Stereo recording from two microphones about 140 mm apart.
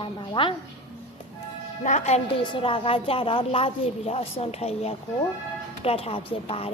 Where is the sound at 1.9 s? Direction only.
55° left (ahead or behind).